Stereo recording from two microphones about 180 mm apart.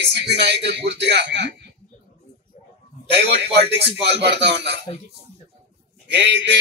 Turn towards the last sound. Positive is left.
turn(degrees=-70)  # may be behind; listen again after turning